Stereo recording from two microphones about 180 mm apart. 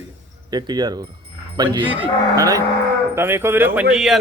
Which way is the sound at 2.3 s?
20° right (ahead or behind).